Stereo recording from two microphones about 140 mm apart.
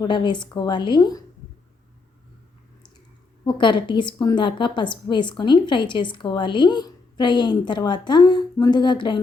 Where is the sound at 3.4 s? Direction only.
35° left (ahead or behind).